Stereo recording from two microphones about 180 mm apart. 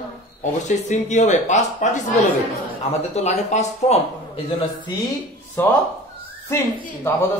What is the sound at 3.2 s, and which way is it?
Speech, 40° left (ahead or behind).